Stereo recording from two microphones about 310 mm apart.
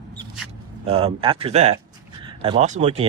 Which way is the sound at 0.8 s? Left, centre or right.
Centre.